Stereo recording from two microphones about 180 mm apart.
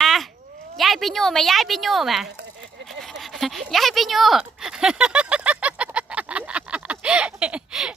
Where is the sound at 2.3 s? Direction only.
85° right.